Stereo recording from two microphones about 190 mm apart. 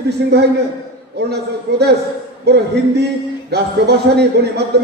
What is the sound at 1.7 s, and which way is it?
Speech, 60° right (ahead or behind).